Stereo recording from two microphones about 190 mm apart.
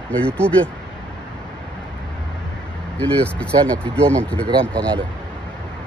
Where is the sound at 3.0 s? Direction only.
5° left (ahead or behind).